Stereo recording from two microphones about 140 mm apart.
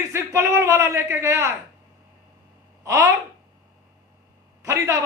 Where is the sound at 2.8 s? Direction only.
20° right (ahead or behind).